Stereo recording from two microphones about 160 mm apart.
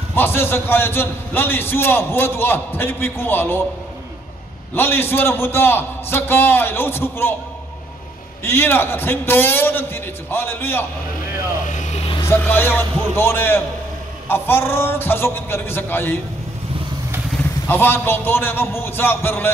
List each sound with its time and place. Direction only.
0.1 s a man's voice: 15° left (ahead or behind)
4.7 s a man's voice: 15° left (ahead or behind)
8.5 s a man's voice: 15° left (ahead or behind)
11.7 s vehicle: 45° left (ahead or behind)
12.2 s a man's voice: 15° left (ahead or behind)
17.6 s a man's voice: 15° left (ahead or behind)